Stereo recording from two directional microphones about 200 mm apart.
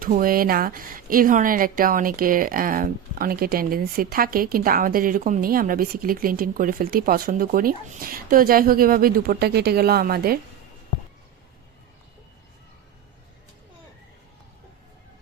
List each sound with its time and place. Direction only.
0.0 s speech: 45° right (ahead or behind)